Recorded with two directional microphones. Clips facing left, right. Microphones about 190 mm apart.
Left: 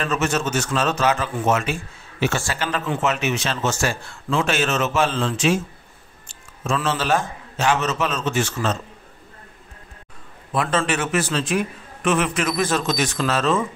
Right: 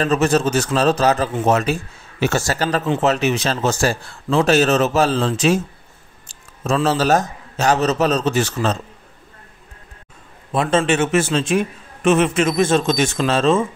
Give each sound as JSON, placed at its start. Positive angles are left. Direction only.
{"t": 0.0, "sound": "a man's voice", "side_deg": -35}
{"t": 10.5, "sound": "a man's voice", "side_deg": -25}